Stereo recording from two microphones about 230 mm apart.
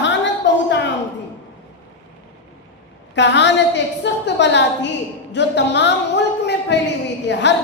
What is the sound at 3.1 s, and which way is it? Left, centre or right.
A woman's voice, left.